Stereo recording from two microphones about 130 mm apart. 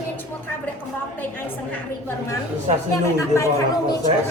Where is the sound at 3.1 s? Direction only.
25° left (ahead or behind).